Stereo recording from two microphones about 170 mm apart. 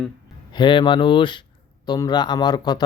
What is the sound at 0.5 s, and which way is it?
Speech, 25° left (ahead or behind).